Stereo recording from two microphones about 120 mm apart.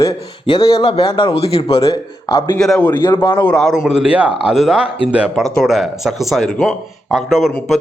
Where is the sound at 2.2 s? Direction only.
35° left (ahead or behind).